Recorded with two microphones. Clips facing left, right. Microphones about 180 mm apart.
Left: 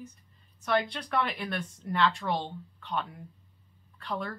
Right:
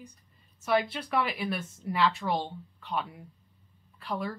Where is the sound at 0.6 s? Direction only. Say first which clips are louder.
Right 1 dB; 5° right (ahead or behind).